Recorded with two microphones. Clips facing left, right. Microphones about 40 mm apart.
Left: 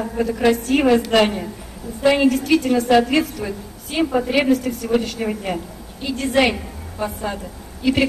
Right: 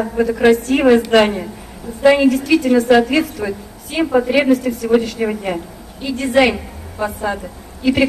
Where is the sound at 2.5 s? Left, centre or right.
Right.